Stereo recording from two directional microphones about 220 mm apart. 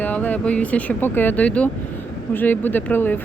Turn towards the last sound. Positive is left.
turn(degrees=10)  # may be behind; listen again after turning